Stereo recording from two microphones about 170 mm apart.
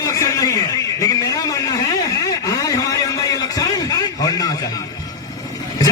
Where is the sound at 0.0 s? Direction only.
20° left (ahead or behind).